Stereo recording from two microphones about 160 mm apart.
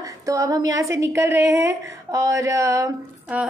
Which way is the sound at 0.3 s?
20° right (ahead or behind).